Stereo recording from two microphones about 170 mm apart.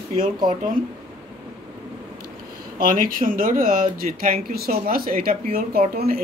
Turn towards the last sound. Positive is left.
turn(degrees=-60)  # may be behind; listen again after turning